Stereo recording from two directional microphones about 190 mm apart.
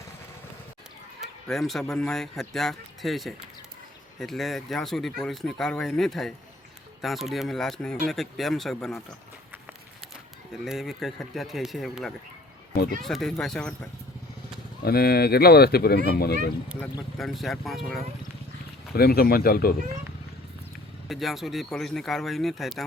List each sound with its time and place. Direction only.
1.5 s speech: centre (ahead or behind)
10.5 s speech: centre (ahead or behind)
14.8 s speech: 55° left (ahead or behind)
17.2 s speech: centre (ahead or behind)
18.9 s speech: 55° left (ahead or behind)
21.1 s speech: centre (ahead or behind)